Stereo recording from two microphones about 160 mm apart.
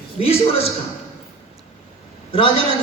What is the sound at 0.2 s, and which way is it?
Speech, 40° left (ahead or behind).